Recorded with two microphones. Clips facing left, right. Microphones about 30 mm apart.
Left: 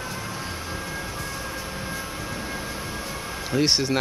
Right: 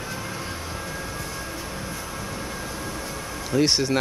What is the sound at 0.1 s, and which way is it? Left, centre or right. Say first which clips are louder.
Vehicle: even; centre.